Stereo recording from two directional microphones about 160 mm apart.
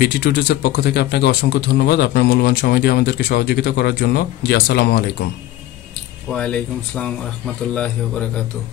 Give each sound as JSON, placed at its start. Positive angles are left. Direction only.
{"t": 0.0, "sound": "a man's voice", "side_deg": 90}
{"t": 6.3, "sound": "speech", "side_deg": 5}